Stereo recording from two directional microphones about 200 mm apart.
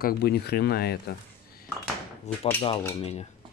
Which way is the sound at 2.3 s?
35° left (ahead or behind).